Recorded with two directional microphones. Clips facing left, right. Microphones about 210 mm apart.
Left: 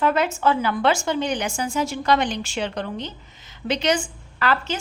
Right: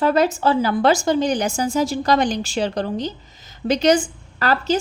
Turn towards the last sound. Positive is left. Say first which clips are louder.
# right 4 dB
turn(degrees=-40)  # may be behind; listen again after turning